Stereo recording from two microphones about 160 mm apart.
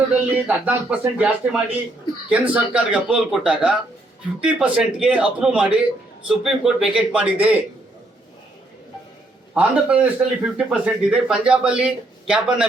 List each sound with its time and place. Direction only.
0.1 s a man's voice: 10° right (ahead or behind)
9.6 s a man's voice: 10° right (ahead or behind)